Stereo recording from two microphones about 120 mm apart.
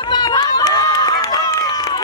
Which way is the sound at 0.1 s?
35° left (ahead or behind).